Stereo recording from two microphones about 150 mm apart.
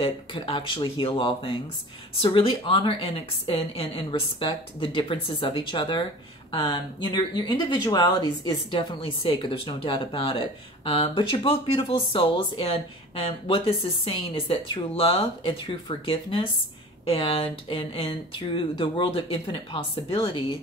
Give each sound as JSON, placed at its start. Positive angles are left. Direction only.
{"t": 0.0, "sound": "speech", "side_deg": 35}